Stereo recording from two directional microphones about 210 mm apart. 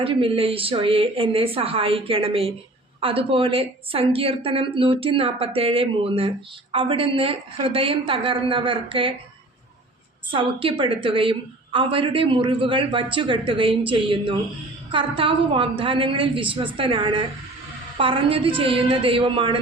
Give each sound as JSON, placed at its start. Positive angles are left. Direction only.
{"t": 0.0, "sound": "a woman's voice", "side_deg": -25}
{"t": 10.3, "sound": "a woman's voice", "side_deg": -25}